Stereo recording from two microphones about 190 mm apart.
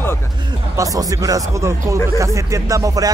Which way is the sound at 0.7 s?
20° right (ahead or behind).